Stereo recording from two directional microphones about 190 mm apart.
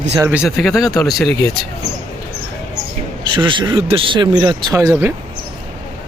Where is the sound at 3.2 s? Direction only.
25° right (ahead or behind).